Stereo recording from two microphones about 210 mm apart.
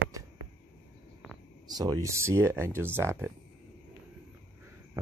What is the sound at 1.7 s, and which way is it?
Speech, 20° right (ahead or behind).